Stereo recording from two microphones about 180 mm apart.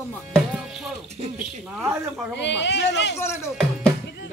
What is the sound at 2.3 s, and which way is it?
Speech, 75° left (ahead or behind).